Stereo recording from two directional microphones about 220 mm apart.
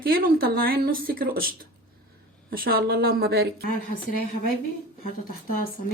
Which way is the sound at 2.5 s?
40° right (ahead or behind).